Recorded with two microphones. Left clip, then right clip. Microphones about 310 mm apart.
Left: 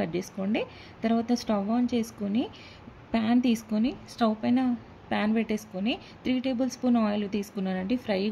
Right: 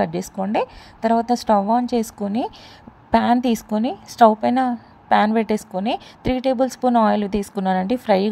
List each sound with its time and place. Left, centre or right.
0.0 s a woman's voice: right